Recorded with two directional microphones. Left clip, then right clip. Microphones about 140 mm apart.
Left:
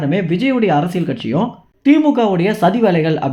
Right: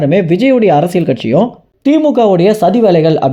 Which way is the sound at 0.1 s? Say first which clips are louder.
Right 6 dB; 45° right (ahead or behind).